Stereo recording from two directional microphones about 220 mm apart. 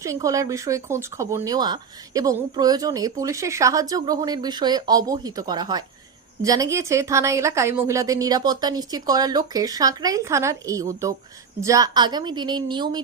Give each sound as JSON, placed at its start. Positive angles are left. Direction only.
{"t": 0.0, "sound": "a woman's voice", "side_deg": -15}